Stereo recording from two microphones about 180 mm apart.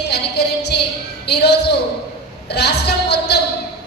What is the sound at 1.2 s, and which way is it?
A woman's voice, 65° left (ahead or behind).